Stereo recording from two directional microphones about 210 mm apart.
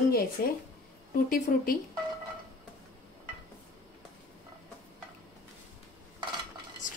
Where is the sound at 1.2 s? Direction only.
45° left (ahead or behind).